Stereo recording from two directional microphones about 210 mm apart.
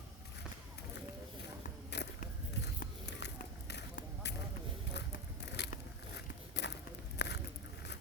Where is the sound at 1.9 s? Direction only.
55° left (ahead or behind).